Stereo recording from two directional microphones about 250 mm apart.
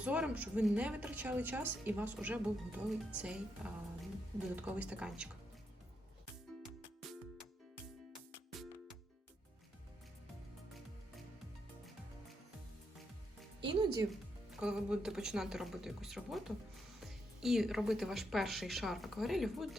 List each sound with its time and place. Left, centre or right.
0.0 s speech: centre
13.7 s speech: centre
14.6 s speech: centre